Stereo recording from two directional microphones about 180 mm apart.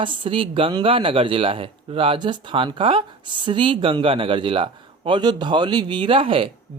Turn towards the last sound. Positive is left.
turn(degrees=-30)  # may be behind; listen again after turning